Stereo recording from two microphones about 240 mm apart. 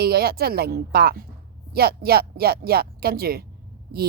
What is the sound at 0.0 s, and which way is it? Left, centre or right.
A woman's voice, right.